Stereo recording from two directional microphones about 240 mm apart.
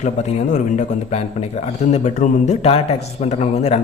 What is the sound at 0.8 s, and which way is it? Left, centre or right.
A man's voice, left.